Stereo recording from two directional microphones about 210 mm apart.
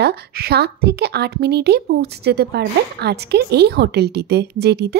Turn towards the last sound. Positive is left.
turn(degrees=-50)  # may be behind; listen again after turning